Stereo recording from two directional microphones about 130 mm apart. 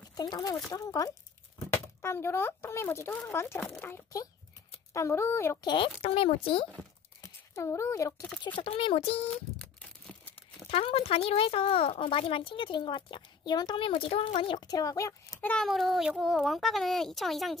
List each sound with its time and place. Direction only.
0.1 s speech: 30° left (ahead or behind)
5.6 s speech: 35° left (ahead or behind)
7.2 s a child's voice: 25° left (ahead or behind)
8.5 s speech: 45° left (ahead or behind)
10.7 s speech: 45° left (ahead or behind); by 15.4 s 25° left (ahead or behind)
15.4 s a child's voice: 5° left (ahead or behind)